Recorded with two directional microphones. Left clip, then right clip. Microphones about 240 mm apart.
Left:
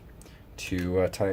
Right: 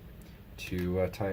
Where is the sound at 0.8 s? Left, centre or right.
Left.